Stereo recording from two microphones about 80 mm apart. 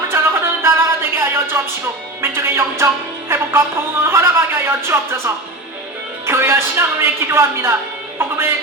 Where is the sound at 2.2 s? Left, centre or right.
Right.